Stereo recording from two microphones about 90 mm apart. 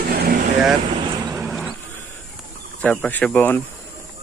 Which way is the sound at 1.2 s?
40° right (ahead or behind).